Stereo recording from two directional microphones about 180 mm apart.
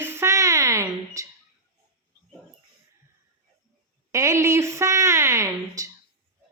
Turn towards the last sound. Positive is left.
turn(degrees=-20)  # may be behind; listen again after turning